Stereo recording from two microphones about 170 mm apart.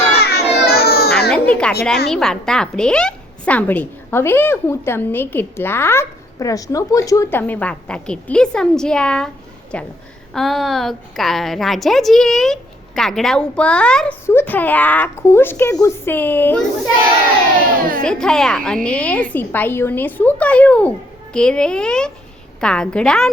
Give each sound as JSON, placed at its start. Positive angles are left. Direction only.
{"t": 0.2, "sound": "baby cry", "side_deg": 65}
{"t": 1.3, "sound": "a sound", "side_deg": 5}
{"t": 2.0, "sound": "a woman's voice", "side_deg": 5}
{"t": 18.0, "sound": "a woman's voice", "side_deg": 5}